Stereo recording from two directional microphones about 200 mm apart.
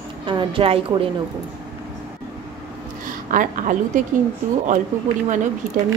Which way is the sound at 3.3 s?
40° right (ahead or behind).